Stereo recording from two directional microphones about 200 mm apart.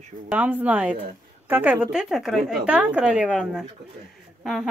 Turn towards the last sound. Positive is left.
turn(degrees=0)  # may be behind; listen again after turning